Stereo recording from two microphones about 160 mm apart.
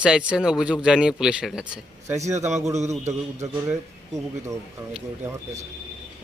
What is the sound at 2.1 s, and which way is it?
Speech, 20° right (ahead or behind).